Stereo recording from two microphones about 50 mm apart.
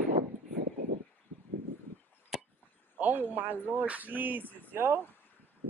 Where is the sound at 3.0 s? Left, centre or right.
Right.